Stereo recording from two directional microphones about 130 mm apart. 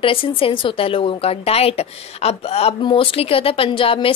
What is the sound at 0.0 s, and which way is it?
A woman's voice, 45° left (ahead or behind).